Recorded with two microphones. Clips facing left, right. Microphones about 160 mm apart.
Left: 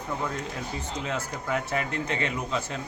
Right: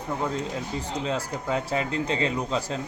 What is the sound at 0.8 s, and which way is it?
Speech, 35° right (ahead or behind).